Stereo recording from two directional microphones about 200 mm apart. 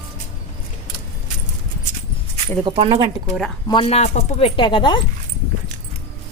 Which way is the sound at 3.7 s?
25° left (ahead or behind).